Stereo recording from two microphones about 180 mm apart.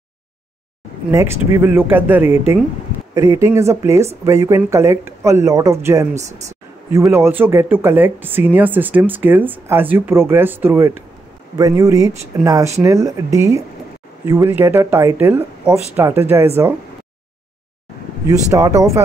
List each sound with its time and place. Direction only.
1.1 s speech: 15° right (ahead or behind)
7.1 s speech: 10° right (ahead or behind)
18.2 s speech: 20° right (ahead or behind)